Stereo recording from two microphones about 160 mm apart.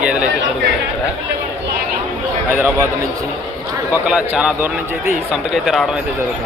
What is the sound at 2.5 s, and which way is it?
Speech, 15° right (ahead or behind).